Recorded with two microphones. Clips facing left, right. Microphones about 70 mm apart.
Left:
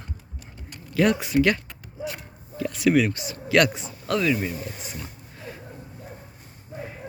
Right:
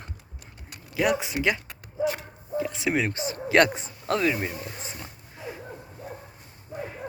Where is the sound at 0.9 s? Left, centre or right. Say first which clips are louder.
Left 4 dB; centre; by 5.0 s right.